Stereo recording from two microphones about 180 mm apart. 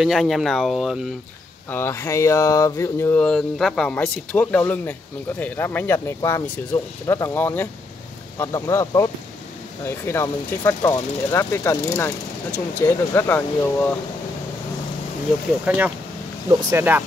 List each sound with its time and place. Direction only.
0.0 s speech: centre (ahead or behind)
1.7 s speech: 15° left (ahead or behind)
15.6 s speech: 10° right (ahead or behind)